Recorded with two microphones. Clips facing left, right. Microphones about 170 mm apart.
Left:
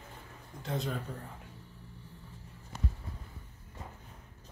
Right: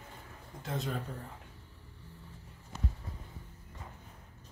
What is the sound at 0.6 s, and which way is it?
Speech, centre (ahead or behind).